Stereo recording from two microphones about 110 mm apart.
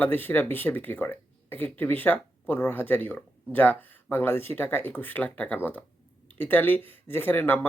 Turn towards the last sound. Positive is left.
turn(degrees=15)  # may be behind; listen again after turning